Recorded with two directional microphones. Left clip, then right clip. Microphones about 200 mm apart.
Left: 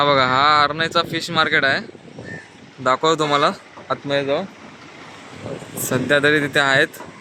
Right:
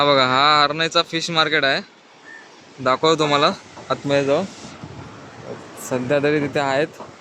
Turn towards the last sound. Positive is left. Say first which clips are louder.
# left 4 dB
turn(degrees=0)  # may be behind; listen again after turning